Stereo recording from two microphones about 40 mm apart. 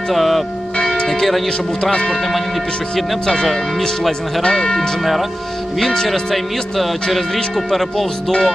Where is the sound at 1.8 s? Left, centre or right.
Left.